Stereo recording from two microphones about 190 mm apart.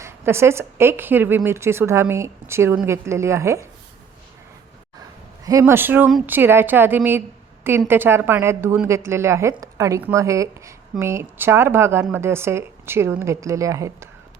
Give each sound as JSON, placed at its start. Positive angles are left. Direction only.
{"t": 0.0, "sound": "a woman's voice", "side_deg": -15}
{"t": 5.5, "sound": "a woman's voice", "side_deg": -15}